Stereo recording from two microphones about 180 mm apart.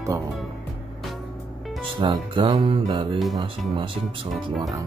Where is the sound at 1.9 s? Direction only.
25° right (ahead or behind).